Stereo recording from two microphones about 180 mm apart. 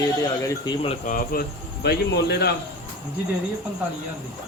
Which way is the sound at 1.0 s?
50° left (ahead or behind).